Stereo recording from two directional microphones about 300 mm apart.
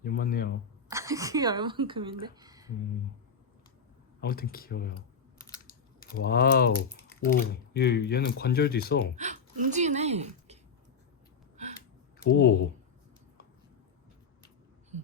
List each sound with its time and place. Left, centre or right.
0.0 s a sound: left
0.9 s speech: centre
4.2 s speech: left
6.1 s speech: left
9.1 s speech: right
12.2 s speech: left